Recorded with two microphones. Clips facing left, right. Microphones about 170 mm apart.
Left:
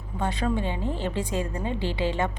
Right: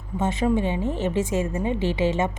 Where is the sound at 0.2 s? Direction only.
20° right (ahead or behind).